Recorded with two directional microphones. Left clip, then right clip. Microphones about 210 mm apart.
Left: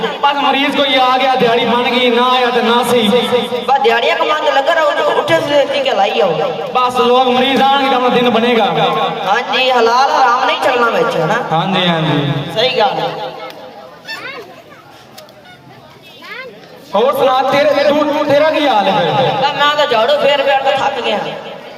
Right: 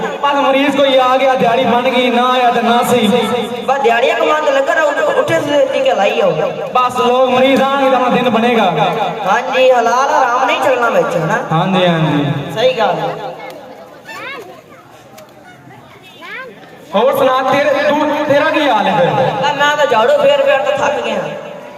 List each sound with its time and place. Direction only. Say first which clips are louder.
0.0 s a man's voice: even; 35° right (ahead or behind)
16.9 s a man's voice: even; 30° right (ahead or behind)